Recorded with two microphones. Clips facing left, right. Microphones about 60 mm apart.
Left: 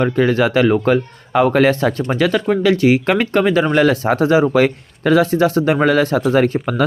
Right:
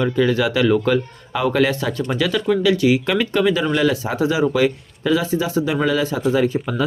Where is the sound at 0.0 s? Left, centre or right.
Left.